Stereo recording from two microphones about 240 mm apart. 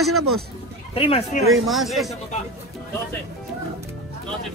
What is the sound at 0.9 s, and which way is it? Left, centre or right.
Speech, left.